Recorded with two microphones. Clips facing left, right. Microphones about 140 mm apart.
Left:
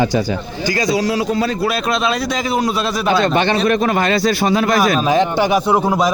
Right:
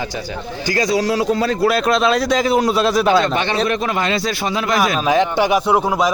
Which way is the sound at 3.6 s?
50° left (ahead or behind).